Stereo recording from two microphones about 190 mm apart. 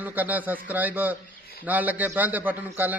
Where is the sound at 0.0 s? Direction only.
10° right (ahead or behind).